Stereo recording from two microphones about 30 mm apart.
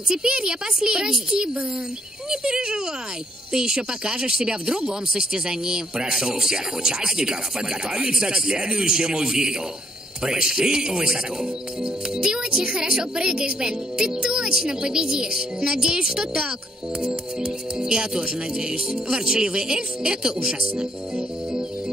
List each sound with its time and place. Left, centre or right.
0.1 s speech: right